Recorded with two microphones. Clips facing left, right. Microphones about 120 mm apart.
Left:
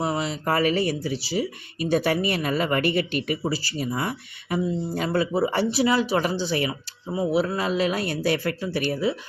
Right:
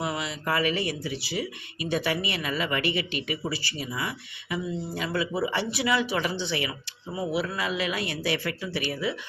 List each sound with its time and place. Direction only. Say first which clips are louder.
0.0 s speech: left 5 dB; 35° left (ahead or behind)